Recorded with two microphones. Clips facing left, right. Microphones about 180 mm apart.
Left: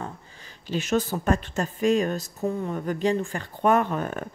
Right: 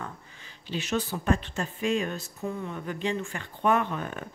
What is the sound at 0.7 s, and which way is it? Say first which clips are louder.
Speech: left 5 dB; 45° left (ahead or behind).